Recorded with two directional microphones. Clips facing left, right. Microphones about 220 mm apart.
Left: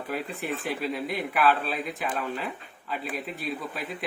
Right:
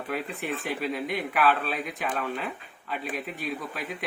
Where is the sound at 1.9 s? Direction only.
Centre (ahead or behind).